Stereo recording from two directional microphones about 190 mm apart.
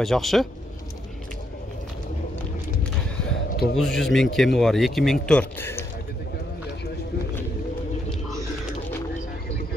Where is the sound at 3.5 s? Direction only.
55° left (ahead or behind).